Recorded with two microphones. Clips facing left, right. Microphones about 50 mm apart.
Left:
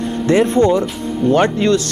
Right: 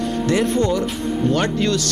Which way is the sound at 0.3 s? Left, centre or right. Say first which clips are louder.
Left 7 dB; left.